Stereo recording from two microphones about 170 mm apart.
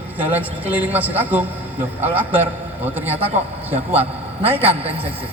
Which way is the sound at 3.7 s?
35° right (ahead or behind).